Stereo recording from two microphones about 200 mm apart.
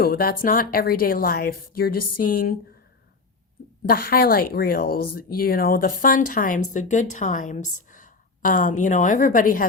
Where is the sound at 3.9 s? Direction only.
50° left (ahead or behind).